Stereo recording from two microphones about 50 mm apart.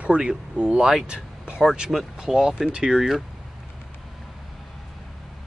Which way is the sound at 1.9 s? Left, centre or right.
Centre.